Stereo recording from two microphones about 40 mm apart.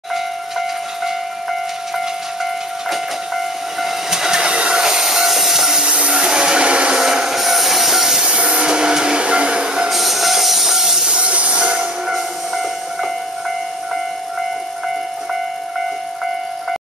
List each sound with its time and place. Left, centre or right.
0.1 s train: centre
3.8 s train: centre
5.9 s a sound: right
7.0 s vehicle: centre
8.3 s train: right
9.8 s train: centre
11.1 s train: right
12.1 s train: centre